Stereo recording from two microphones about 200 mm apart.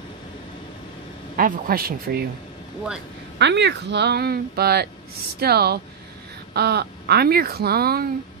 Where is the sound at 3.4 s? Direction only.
60° right (ahead or behind).